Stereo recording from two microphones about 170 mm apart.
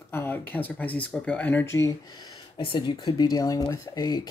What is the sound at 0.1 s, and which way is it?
Speech, 15° left (ahead or behind).